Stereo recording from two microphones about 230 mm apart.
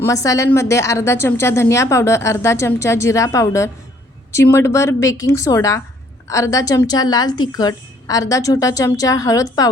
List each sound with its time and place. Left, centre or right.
0.0 s speech: centre